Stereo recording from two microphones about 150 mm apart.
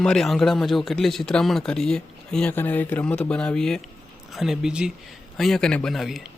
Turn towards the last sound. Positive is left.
turn(degrees=0)  # may be behind; listen again after turning